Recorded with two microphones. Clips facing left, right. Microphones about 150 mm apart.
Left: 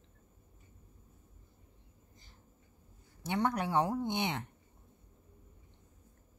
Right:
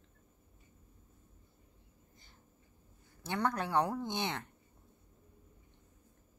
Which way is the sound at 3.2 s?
20° left (ahead or behind).